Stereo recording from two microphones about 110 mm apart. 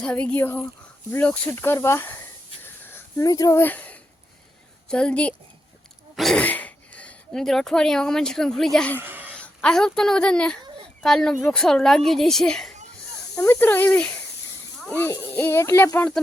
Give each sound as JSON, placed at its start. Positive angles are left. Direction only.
{"t": 0.0, "sound": "speech", "side_deg": 5}
{"t": 0.3, "sound": "speech", "side_deg": 20}
{"t": 2.9, "sound": "speech", "side_deg": 30}
{"t": 3.6, "sound": "speech", "side_deg": 15}
{"t": 6.1, "sound": "throat clearing", "side_deg": 0}
{"t": 6.4, "sound": "speech", "side_deg": 15}
{"t": 9.0, "sound": "a sound", "side_deg": -15}
{"t": 9.4, "sound": "a woman's voice", "side_deg": 10}
{"t": 13.4, "sound": "speech", "side_deg": 15}
{"t": 15.3, "sound": "speech", "side_deg": 20}